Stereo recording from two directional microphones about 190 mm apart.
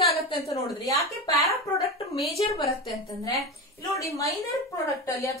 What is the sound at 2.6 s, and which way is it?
Speech, 30° left (ahead or behind).